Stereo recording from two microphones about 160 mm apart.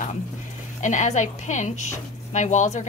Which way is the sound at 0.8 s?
50° left (ahead or behind).